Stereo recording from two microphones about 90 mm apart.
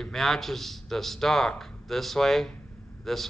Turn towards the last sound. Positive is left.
turn(degrees=5)  # may be behind; listen again after turning